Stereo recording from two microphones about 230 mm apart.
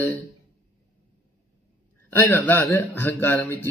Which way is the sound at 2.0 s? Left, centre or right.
Centre.